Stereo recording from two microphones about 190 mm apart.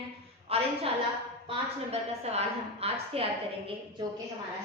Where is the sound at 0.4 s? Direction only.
30° right (ahead or behind).